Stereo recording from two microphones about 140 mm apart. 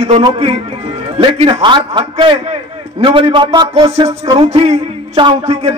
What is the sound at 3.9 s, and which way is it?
A man's voice, 50° right (ahead or behind).